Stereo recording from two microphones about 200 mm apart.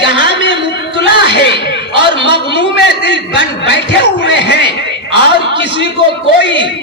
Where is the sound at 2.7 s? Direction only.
60° left (ahead or behind).